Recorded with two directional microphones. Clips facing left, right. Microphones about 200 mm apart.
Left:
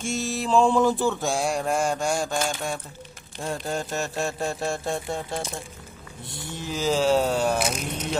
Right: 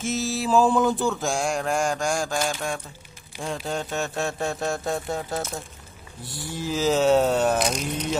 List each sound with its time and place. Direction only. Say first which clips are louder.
0.0 s mantra: right 2 dB; centre (ahead or behind)
6.2 s a sound: right 3 dB; 20° left (ahead or behind)
6.6 s mantra: right 2 dB; centre (ahead or behind)